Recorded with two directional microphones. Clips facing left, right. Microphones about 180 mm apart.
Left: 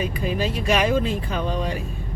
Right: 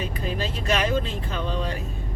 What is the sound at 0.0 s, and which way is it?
Speech, 10° left (ahead or behind).